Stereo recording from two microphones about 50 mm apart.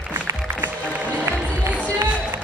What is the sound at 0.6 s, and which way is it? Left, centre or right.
Music, right.